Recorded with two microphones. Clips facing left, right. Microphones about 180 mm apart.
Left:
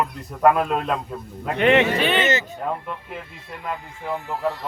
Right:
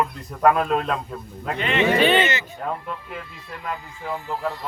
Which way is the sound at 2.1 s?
40° left (ahead or behind).